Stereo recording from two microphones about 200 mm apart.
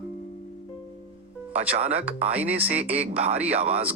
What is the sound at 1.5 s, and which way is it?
Speech, 30° right (ahead or behind).